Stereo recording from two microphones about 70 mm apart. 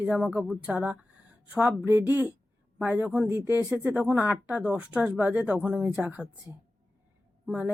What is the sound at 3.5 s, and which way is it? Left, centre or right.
Speech, right.